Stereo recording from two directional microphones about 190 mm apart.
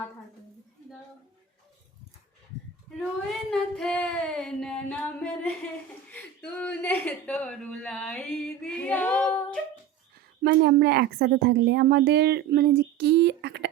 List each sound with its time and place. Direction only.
3.5 s speech: centre (ahead or behind)
10.4 s a woman's voice: 60° right (ahead or behind)